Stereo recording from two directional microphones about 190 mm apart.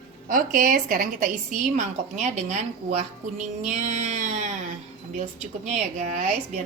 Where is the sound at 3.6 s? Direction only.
40° right (ahead or behind).